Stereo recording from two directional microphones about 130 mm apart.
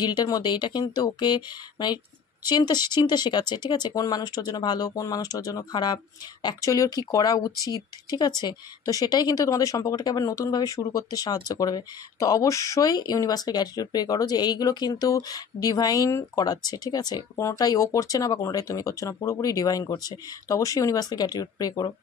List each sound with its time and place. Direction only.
0.0 s a woman's voice: 35° left (ahead or behind)